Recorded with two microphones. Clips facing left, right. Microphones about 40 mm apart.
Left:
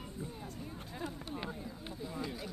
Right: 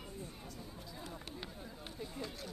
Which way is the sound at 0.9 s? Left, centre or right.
Left.